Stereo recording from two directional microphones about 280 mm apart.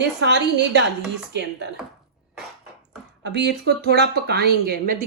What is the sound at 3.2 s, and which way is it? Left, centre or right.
Speech, right.